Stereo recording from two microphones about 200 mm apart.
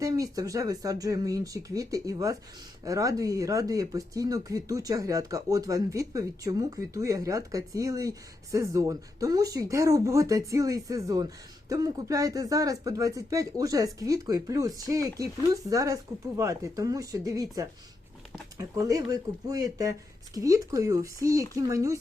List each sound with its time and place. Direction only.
0.0 s speech: 15° right (ahead or behind)